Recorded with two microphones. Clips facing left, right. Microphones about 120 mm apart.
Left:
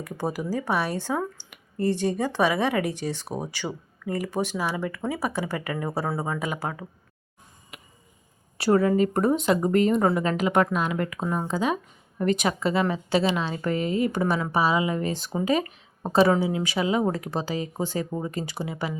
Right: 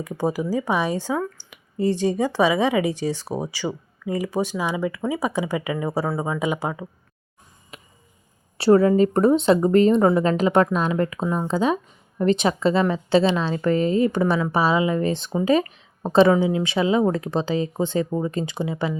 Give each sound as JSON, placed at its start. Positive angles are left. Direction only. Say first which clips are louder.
{"t": 0.0, "sound": "speech", "louder": "right 5 dB", "side_deg": -15}
{"t": 7.7, "sound": "a sound", "louder": "right 3 dB", "side_deg": -30}
{"t": 8.5, "sound": "speech", "louder": "right 5 dB", "side_deg": -30}